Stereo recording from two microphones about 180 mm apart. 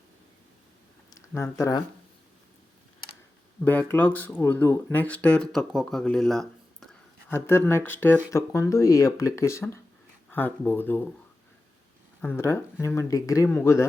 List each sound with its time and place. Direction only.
1.3 s speech: 15° left (ahead or behind)
3.6 s speech: 10° left (ahead or behind)
7.3 s speech: 15° left (ahead or behind)
12.2 s speech: 10° left (ahead or behind)